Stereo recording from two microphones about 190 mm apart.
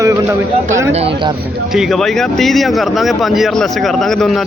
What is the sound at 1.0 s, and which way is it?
Speech, 30° right (ahead or behind).